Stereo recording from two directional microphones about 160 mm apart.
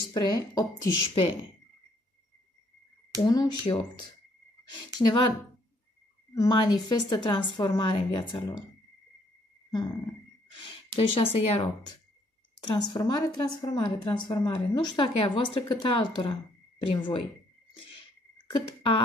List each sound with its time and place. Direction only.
0.1 s a woman's voice: 25° left (ahead or behind)
3.3 s a woman's voice: 30° left (ahead or behind)
6.3 s a woman's voice: 25° left (ahead or behind)
11.0 s a woman's voice: 35° left (ahead or behind)
18.5 s speech: 35° left (ahead or behind)